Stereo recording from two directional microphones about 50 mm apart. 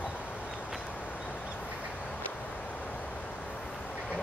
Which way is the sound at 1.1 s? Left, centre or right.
Centre.